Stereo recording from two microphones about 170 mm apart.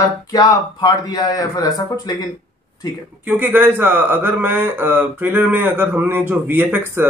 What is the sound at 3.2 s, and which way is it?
Speech, 10° right (ahead or behind).